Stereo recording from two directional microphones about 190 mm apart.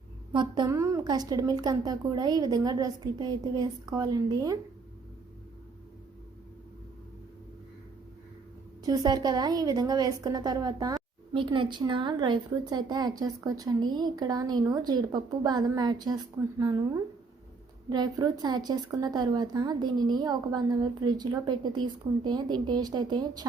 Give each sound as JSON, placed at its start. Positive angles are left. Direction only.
{"t": 0.3, "sound": "a woman's voice", "side_deg": -20}
{"t": 8.8, "sound": "a woman's voice", "side_deg": -20}